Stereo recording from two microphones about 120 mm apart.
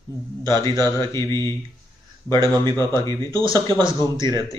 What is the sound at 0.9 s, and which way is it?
Speech, 25° left (ahead or behind).